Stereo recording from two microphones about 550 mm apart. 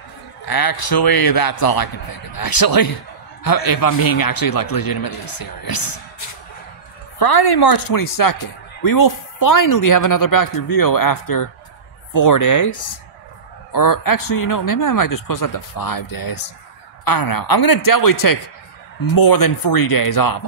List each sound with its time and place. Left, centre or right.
0.5 s speech: left
7.2 s speech: left